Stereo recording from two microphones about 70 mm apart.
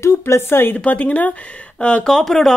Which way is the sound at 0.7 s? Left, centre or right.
Left.